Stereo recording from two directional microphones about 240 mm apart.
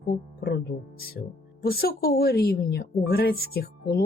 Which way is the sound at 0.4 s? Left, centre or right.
Left.